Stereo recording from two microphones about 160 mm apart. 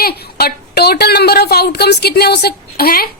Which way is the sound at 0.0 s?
80° left.